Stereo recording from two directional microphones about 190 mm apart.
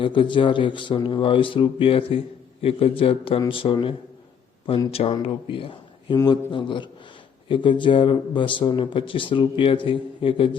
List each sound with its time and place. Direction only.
0.0 s a man's voice: 25° left (ahead or behind)